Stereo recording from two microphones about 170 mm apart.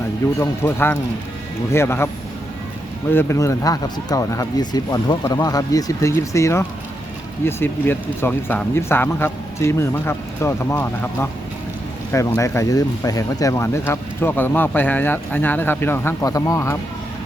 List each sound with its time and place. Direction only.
0.3 s speech: 15° left (ahead or behind)
3.1 s speech: 15° left (ahead or behind)